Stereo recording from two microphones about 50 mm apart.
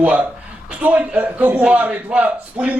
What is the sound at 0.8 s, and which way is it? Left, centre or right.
A man's voice, right.